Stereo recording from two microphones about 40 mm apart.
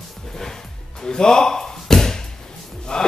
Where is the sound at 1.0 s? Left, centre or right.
Centre.